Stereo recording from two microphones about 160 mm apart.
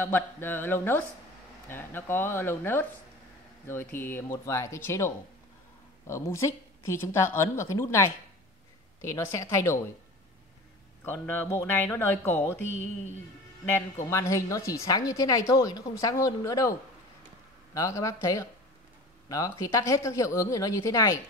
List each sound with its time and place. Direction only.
0.0 s a woman's voice: 15° left (ahead or behind)
3.9 s a woman's voice: 15° left (ahead or behind)
11.1 s a woman's voice: 15° left (ahead or behind)
13.7 s a woman's voice: 20° left (ahead or behind)
17.7 s a woman's voice: 20° left (ahead or behind)